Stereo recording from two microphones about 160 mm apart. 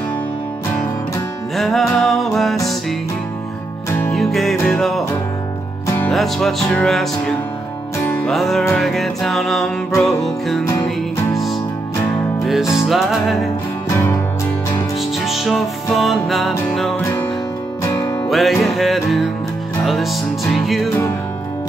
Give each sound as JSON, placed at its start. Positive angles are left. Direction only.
{"t": 1.6, "sound": "music", "side_deg": 0}
{"t": 4.1, "sound": "music", "side_deg": 0}
{"t": 12.8, "sound": "music", "side_deg": 0}
{"t": 13.8, "sound": "music", "side_deg": 15}
{"t": 15.0, "sound": "music", "side_deg": 0}
{"t": 18.3, "sound": "music", "side_deg": 0}